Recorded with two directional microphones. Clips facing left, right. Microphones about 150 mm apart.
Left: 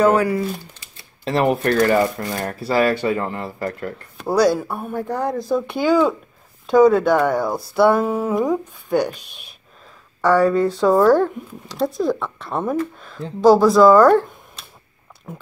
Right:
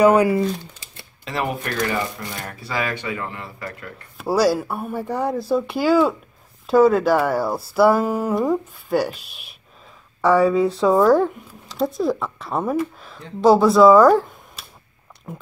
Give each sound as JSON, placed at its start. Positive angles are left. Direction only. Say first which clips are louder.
{"t": 0.0, "sound": "speech", "louder": "right 2 dB", "side_deg": -15}
{"t": 1.4, "sound": "speech", "louder": "left 7 dB", "side_deg": 50}
{"t": 4.2, "sound": "speech", "louder": "left 1 dB", "side_deg": -5}